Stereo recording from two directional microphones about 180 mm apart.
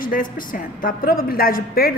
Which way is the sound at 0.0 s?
50° left (ahead or behind).